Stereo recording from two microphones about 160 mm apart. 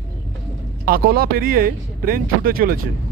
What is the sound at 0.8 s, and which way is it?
Speech, 65° right (ahead or behind).